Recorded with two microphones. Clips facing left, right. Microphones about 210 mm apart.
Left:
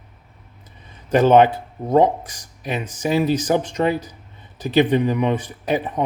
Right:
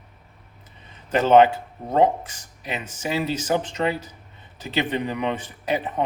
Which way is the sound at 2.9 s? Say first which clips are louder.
Left 7 dB; 15° left (ahead or behind).